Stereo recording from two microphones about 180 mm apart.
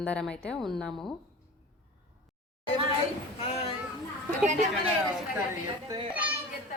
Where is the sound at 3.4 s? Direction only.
35° left (ahead or behind).